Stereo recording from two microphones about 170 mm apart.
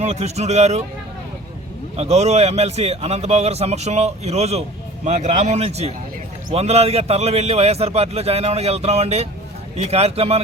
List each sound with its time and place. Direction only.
0.0 s a man's voice: 40° right (ahead or behind)
2.0 s a man's voice: 40° right (ahead or behind)